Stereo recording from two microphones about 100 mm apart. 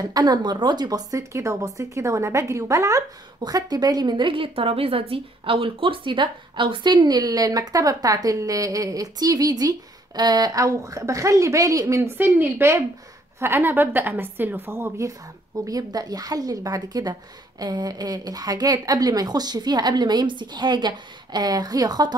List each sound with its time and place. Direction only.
0.0 s a woman's voice: 45° right (ahead or behind)